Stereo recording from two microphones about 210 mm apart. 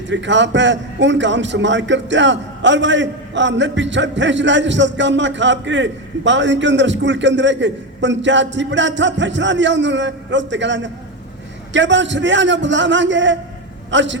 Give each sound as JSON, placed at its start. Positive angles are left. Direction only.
{"t": 0.1, "sound": "a man's voice", "side_deg": -60}